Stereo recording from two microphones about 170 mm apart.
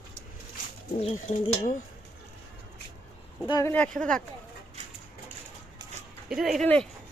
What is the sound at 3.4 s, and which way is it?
Speech, 20° left (ahead or behind).